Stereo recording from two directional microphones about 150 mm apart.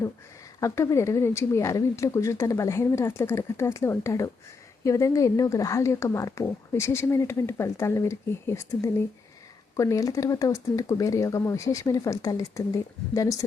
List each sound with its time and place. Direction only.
0.6 s speech: 20° left (ahead or behind)